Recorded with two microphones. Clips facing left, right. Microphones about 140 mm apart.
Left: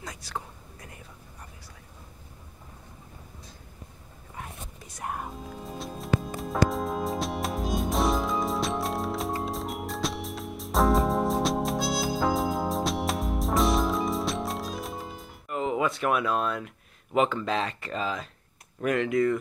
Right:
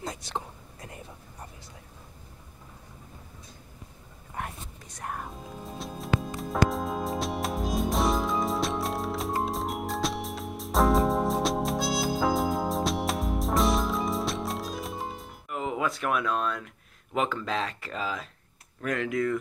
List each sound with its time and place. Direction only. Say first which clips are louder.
0.0 s whispering: right 3 dB; 25° right (ahead or behind)
4.8 s music: left 2 dB; 5° left (ahead or behind)
18.9 s speech: left 4 dB; centre (ahead or behind)